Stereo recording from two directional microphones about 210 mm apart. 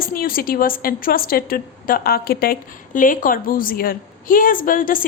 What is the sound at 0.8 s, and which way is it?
A woman's voice, 45° left (ahead or behind).